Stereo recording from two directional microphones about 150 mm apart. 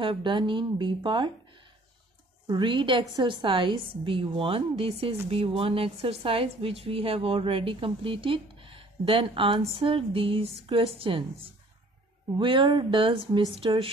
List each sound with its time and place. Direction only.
0.0 s speech: 35° right (ahead or behind)
2.4 s speech: 30° right (ahead or behind)
12.4 s speech: 35° right (ahead or behind)